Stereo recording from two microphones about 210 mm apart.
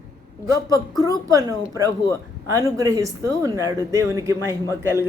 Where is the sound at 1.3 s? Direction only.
15° right (ahead or behind).